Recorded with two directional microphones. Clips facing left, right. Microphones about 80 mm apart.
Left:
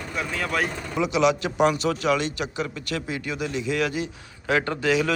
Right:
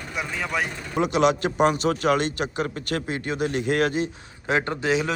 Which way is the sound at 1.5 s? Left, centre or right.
Right.